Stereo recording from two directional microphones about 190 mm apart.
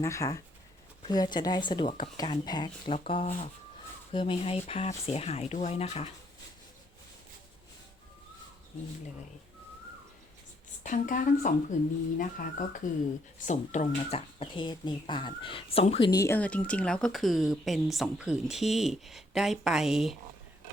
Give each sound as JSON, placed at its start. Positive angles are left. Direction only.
{"t": 0.0, "sound": "speech", "side_deg": 15}
{"t": 10.8, "sound": "speech", "side_deg": 45}